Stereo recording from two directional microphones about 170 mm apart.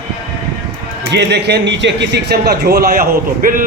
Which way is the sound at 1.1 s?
85° right.